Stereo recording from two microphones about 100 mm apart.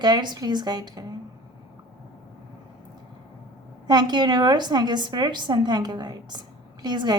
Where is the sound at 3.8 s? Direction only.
45° right (ahead or behind).